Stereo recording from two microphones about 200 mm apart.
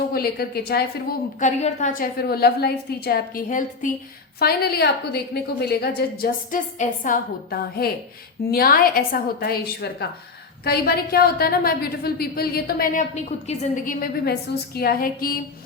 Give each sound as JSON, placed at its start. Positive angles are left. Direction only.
{"t": 0.1, "sound": "a woman's voice", "side_deg": 50}
{"t": 1.4, "sound": "a woman's voice", "side_deg": 35}
{"t": 4.4, "sound": "a woman's voice", "side_deg": 50}
{"t": 13.5, "sound": "a woman's voice", "side_deg": 35}